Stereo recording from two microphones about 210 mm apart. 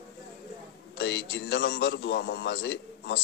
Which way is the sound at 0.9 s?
55° left (ahead or behind).